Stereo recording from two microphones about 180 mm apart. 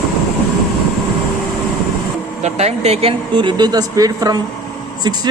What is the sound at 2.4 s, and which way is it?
A woman's voice, 35° right (ahead or behind).